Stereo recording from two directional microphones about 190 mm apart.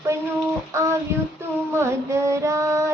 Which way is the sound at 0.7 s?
15° right (ahead or behind).